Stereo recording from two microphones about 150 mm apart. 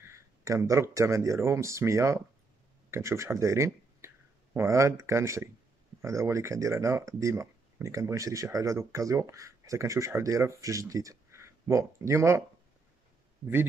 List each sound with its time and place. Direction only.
0.0 s speech: 20° right (ahead or behind)